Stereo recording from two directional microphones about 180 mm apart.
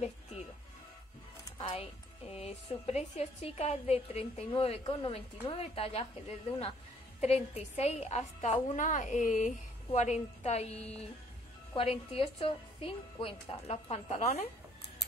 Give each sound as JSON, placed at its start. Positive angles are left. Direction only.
{"t": 0.0, "sound": "music", "side_deg": 35}
{"t": 1.6, "sound": "a woman's voice", "side_deg": 30}